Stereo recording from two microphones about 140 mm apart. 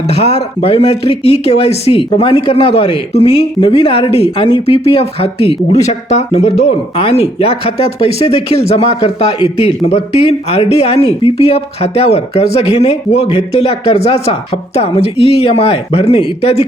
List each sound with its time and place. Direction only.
0.1 s speech: 50° left (ahead or behind)